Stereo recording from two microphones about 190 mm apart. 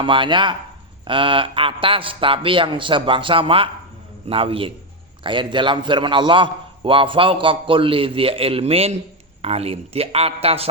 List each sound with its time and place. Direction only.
0.0 s a man's voice: 25° right (ahead or behind)